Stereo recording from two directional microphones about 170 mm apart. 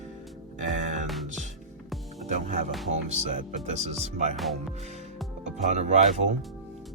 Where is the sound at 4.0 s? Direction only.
40° right (ahead or behind).